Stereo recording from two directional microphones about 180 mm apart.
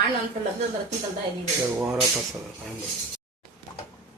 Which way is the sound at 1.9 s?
Centre (ahead or behind).